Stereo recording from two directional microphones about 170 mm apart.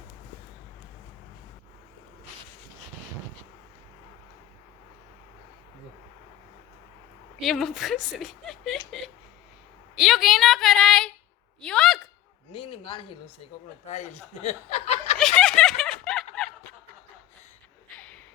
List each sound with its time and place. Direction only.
7.4 s speech: centre (ahead or behind)
10.0 s speech: centre (ahead or behind)
12.5 s speech: 30° left (ahead or behind)
13.8 s speech: 40° left (ahead or behind)
15.2 s snicker: 5° left (ahead or behind)
17.9 s a sound: 5° left (ahead or behind)